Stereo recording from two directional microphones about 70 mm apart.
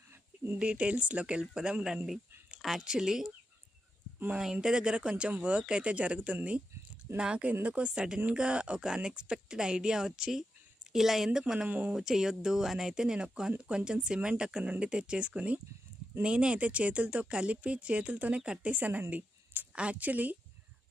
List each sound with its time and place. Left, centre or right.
0.6 s speech: centre
4.6 s speech: centre
11.7 s speech: right
11.9 s a woman's voice: centre; by 20.3 s right